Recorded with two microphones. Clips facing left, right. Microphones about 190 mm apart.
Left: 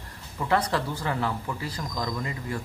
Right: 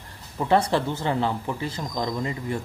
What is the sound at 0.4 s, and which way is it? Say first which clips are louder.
Speech: right 4 dB; 25° right (ahead or behind).